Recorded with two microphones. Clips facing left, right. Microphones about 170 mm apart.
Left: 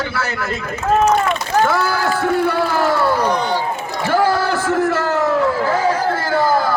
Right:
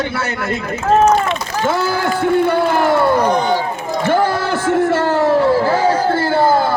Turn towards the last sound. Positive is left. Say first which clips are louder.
# right 3 dB
turn(degrees=-25)  # may be behind; listen again after turning